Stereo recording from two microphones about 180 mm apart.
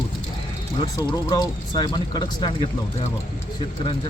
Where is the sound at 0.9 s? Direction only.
20° left (ahead or behind).